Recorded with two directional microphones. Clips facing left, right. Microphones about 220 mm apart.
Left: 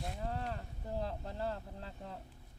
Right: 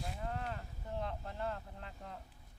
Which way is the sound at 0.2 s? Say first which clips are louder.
Left 2 dB; 35° left (ahead or behind).